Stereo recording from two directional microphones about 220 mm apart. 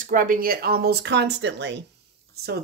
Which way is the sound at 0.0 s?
40° right (ahead or behind).